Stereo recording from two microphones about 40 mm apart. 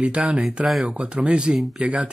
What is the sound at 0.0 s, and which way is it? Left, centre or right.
Speech, right.